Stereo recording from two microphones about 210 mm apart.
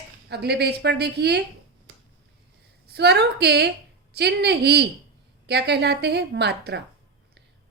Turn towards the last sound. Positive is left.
turn(degrees=-55)  # may be behind; listen again after turning